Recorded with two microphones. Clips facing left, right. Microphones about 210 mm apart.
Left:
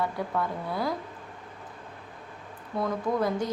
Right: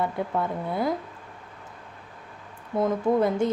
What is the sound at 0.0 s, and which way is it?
Speech, 20° right (ahead or behind).